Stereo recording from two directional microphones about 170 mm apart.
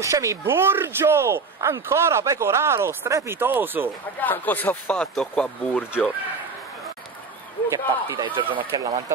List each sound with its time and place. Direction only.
0.0 s speech: 20° right (ahead or behind)
4.2 s speech: 10° left (ahead or behind)
7.7 s speech: 20° right (ahead or behind)